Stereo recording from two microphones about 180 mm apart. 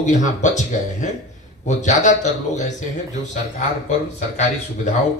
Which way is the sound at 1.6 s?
40° left (ahead or behind).